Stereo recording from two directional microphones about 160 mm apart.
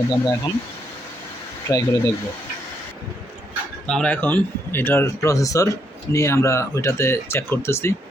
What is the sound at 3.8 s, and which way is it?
Speech, 5° left (ahead or behind).